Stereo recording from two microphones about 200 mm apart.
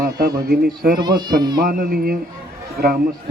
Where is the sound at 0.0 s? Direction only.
50° right (ahead or behind).